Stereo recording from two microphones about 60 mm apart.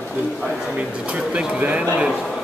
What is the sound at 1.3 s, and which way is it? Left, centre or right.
Speech, right.